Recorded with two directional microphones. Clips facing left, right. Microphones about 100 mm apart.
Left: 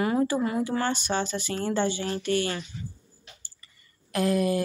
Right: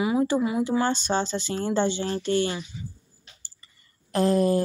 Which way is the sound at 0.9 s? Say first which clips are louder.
Right 2 dB; 30° right (ahead or behind).